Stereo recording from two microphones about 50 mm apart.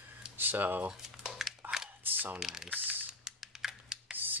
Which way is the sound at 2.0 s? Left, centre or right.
Right.